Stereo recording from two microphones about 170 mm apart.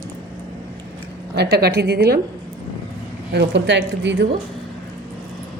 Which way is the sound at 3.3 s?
90° right.